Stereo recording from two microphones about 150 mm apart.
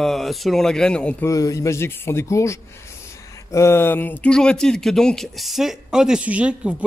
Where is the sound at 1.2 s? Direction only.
20° left (ahead or behind).